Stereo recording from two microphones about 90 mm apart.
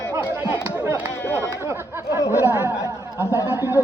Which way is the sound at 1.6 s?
30° right (ahead or behind).